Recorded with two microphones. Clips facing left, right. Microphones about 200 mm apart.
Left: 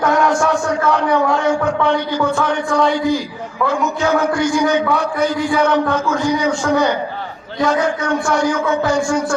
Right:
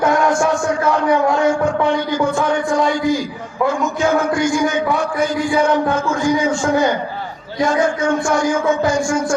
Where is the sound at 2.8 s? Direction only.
45° right (ahead or behind).